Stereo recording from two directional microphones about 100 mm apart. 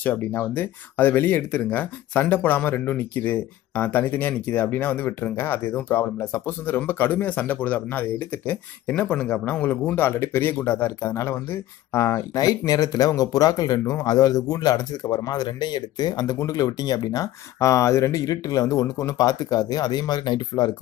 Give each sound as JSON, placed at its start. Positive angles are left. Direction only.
{"t": 0.0, "sound": "speech", "side_deg": 20}